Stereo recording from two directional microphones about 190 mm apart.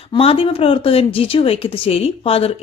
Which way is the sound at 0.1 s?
30° left (ahead or behind).